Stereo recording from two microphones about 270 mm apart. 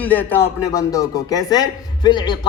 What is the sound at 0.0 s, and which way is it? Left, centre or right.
Speech, centre.